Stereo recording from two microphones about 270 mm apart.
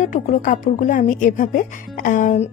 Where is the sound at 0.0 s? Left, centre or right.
Left.